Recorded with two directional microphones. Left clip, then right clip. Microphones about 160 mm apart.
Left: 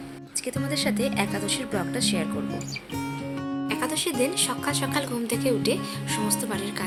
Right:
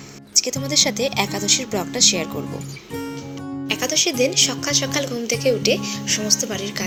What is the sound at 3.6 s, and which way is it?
A woman's voice, 10° right (ahead or behind).